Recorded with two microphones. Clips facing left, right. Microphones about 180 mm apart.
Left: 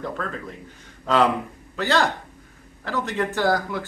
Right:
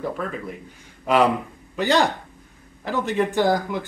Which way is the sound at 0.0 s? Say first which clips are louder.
Right 2 dB; 10° right (ahead or behind).